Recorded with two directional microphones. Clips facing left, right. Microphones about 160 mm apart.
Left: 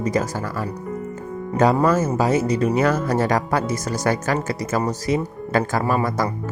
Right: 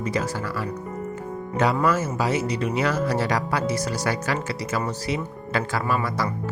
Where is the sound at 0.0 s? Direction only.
45° left (ahead or behind).